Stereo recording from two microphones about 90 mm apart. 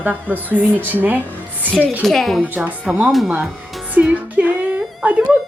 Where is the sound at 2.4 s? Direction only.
15° right (ahead or behind).